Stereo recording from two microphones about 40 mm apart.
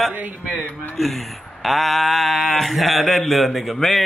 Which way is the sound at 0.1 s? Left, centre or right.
Right.